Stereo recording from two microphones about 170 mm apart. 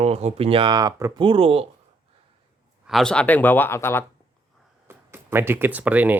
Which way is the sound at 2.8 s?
Centre (ahead or behind).